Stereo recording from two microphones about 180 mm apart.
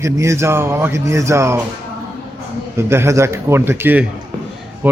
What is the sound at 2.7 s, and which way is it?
Speech, 15° right (ahead or behind).